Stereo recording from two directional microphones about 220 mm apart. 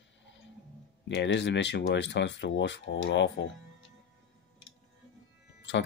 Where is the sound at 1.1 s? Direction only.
50° left (ahead or behind).